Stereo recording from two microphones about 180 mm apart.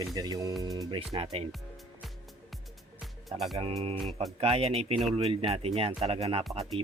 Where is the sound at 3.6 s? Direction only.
30° right (ahead or behind).